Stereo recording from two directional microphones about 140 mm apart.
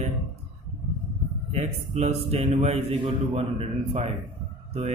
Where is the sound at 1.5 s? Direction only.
55° right (ahead or behind).